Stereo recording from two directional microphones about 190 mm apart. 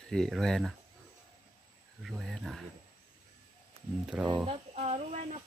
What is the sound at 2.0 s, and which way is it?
Speech, centre (ahead or behind).